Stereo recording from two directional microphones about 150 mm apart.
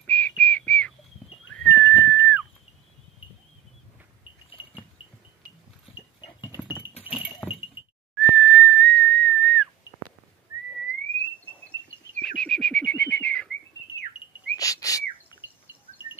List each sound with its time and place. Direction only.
0.0 s a sound: 10° left (ahead or behind)
6.5 s a sound: 15° right (ahead or behind)
7.4 s breaking: 10° left (ahead or behind)
8.2 s whistling: 5° left (ahead or behind)
12.2 s bird: 5° left (ahead or behind)
14.6 s bird: 25° left (ahead or behind)
15.4 s bird: 10° right (ahead or behind)